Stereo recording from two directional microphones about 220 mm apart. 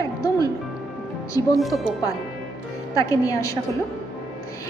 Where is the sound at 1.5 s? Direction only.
Centre (ahead or behind).